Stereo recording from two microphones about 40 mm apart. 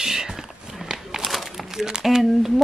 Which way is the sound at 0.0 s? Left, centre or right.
Centre.